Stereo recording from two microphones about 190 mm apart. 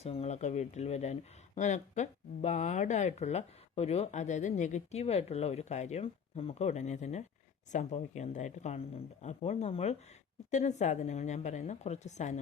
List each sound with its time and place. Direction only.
0.0 s speech: 35° left (ahead or behind)